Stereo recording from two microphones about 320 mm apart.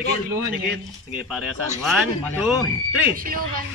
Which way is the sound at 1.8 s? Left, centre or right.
Centre.